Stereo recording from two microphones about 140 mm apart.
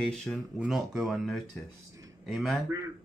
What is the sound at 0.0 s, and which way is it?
Speech, 10° left (ahead or behind).